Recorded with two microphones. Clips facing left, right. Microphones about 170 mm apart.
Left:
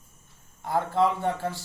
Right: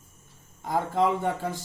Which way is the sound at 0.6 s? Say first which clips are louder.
Left 1 dB; 15° right (ahead or behind).